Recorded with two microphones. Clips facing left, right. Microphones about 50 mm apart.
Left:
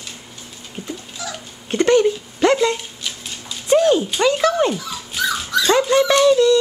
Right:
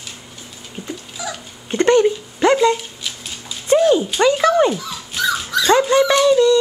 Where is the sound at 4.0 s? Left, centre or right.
Centre.